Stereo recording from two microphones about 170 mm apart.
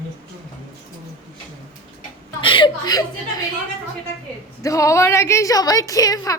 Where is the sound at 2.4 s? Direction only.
30° left (ahead or behind).